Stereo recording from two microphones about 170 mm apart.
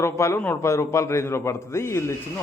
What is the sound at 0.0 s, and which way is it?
Speech, 15° left (ahead or behind).